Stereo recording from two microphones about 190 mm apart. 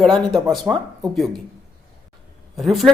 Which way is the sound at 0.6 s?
20° right (ahead or behind).